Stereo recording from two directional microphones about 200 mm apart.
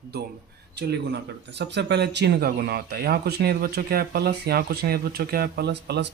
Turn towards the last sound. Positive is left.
turn(degrees=-60)  # may be behind; listen again after turning